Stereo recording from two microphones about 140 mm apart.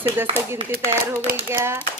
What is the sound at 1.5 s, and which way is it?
Speech, 15° right (ahead or behind).